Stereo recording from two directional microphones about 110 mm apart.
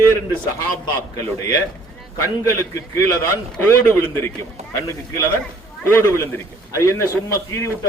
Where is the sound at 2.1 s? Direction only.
30° left (ahead or behind).